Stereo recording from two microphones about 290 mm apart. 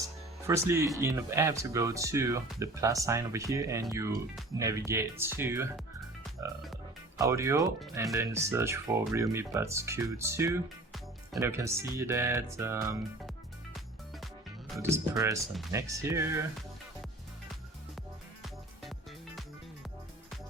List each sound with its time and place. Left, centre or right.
0.4 s speech: centre
6.4 s croak: centre
7.2 s speech: centre
14.8 s speech: centre
18.4 s music: centre